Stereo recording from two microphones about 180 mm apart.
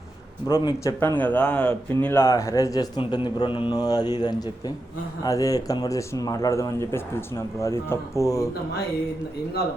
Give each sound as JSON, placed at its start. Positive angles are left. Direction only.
{"t": 0.6, "sound": "speech", "side_deg": 15}
{"t": 3.2, "sound": "mantra", "side_deg": 25}
{"t": 5.2, "sound": "speech", "side_deg": 20}